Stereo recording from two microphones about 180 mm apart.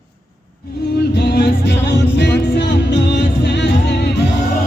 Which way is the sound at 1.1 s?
70° left (ahead or behind).